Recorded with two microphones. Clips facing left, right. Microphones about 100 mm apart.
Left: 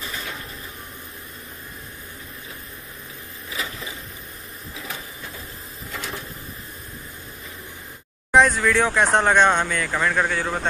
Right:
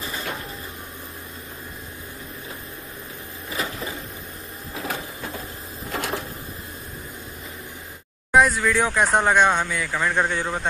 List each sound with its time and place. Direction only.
4.7 s printer: 45° right (ahead or behind)
5.9 s a sound: 55° right (ahead or behind)
8.4 s speech: 10° right (ahead or behind)
10.0 s speech: 20° right (ahead or behind)